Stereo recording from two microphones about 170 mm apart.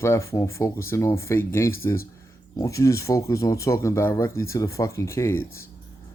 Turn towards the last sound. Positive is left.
turn(degrees=15)  # may be behind; listen again after turning